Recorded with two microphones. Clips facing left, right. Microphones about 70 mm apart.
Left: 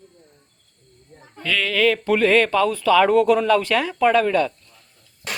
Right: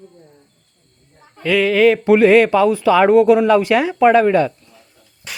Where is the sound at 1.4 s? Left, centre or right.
Centre.